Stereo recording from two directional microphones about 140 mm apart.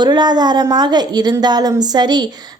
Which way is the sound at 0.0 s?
30° right (ahead or behind).